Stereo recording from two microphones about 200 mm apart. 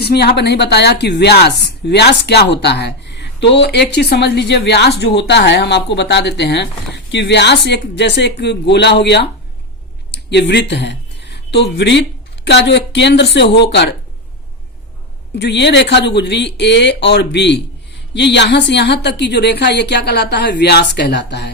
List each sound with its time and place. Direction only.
0.0 s a woman's voice: 55° left (ahead or behind)
15.4 s a woman's voice: 60° left (ahead or behind)